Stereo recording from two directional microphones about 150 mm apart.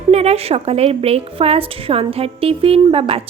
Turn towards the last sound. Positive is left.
turn(degrees=-40)  # may be behind; listen again after turning